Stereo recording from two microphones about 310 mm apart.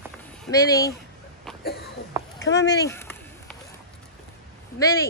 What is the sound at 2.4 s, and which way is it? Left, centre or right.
Speech, left.